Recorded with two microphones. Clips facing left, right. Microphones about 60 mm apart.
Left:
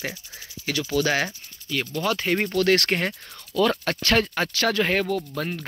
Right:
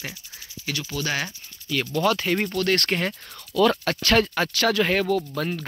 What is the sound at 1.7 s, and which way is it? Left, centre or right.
Speech, centre.